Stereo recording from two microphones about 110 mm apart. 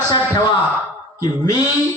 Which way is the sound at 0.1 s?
35° left (ahead or behind).